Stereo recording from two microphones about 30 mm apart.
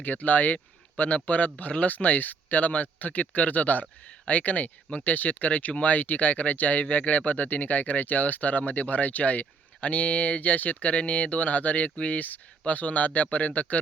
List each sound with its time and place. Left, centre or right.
0.0 s speech: left